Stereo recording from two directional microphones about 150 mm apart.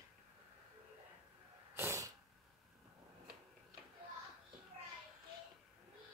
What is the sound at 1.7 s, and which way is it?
Sneeze, 15° right (ahead or behind).